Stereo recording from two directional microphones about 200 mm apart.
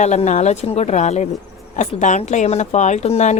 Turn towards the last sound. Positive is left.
turn(degrees=35)  # may be behind; listen again after turning